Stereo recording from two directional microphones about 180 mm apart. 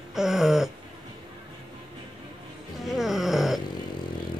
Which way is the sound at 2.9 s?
Centre (ahead or behind).